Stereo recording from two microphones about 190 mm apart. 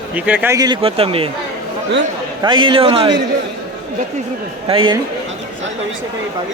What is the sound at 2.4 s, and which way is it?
Speech, 25° right (ahead or behind).